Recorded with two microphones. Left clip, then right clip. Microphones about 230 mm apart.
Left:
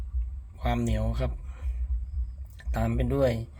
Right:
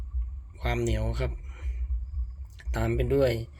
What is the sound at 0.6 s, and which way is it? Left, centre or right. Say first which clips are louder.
Speech: even; centre.